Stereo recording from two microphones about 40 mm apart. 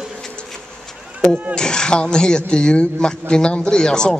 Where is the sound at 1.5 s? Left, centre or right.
Centre.